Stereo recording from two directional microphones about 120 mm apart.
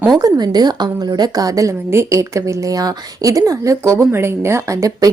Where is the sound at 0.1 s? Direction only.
35° right (ahead or behind).